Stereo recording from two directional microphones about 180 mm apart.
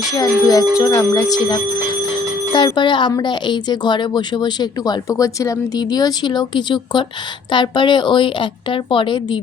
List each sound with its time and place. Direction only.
0.1 s speech: 20° left (ahead or behind)